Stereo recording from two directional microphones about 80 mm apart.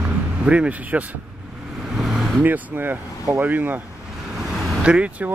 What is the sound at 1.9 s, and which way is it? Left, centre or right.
Vehicle, centre.